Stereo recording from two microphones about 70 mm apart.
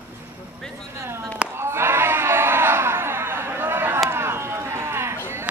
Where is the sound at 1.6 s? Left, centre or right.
Right.